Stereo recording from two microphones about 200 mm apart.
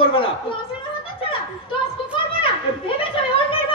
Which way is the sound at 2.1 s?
25° left (ahead or behind).